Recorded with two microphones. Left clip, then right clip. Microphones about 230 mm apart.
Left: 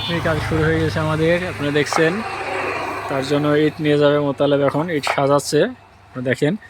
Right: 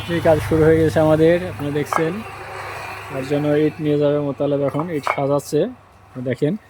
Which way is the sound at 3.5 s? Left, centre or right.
Centre.